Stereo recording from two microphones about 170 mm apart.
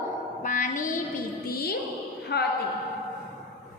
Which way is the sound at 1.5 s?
65° left (ahead or behind).